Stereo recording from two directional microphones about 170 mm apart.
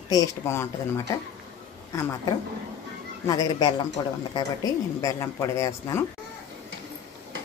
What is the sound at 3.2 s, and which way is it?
Speech, 20° left (ahead or behind).